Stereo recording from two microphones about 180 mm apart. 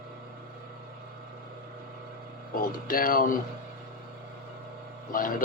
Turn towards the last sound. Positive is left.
turn(degrees=50)  # may be behind; listen again after turning